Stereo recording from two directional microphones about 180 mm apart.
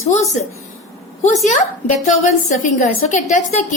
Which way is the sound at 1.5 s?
45° left (ahead or behind).